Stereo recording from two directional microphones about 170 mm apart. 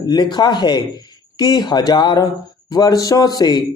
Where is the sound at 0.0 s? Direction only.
25° left (ahead or behind).